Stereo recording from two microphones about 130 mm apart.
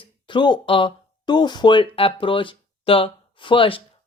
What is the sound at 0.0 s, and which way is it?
Speech, 40° left (ahead or behind).